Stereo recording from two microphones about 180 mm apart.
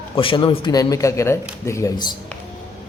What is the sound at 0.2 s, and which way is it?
Speech, 30° left (ahead or behind).